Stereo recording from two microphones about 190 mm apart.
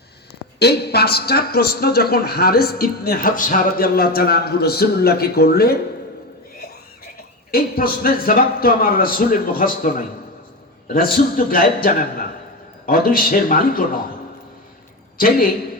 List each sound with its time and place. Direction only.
0.6 s a man's voice: 60° left (ahead or behind)
7.5 s a man's voice: 50° left (ahead or behind)